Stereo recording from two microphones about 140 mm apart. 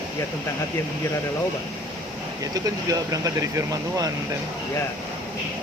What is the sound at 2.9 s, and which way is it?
Speech, 25° right (ahead or behind).